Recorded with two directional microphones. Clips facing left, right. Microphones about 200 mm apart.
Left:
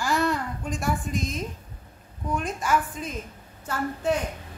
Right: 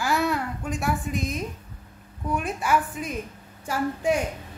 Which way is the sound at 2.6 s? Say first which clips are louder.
Right 2 dB; 10° right (ahead or behind).